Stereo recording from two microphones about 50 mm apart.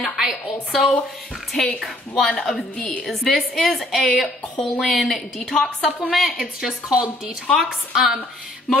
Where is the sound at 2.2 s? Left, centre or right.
Centre.